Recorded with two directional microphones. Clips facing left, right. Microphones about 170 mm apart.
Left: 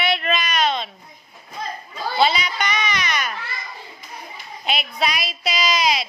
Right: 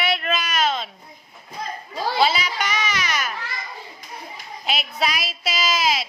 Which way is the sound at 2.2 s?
5° right (ahead or behind).